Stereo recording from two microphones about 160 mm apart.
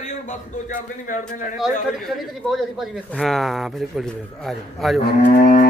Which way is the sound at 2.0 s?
Centre (ahead or behind).